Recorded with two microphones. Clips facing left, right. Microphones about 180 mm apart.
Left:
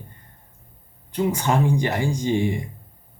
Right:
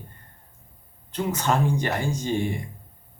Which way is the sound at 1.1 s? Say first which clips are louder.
Left 3 dB; 10° left (ahead or behind).